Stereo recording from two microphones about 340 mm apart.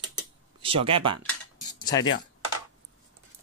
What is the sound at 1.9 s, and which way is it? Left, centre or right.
Speech, centre.